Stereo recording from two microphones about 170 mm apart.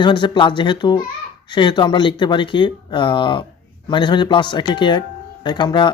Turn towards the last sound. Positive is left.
turn(degrees=25)  # may be behind; listen again after turning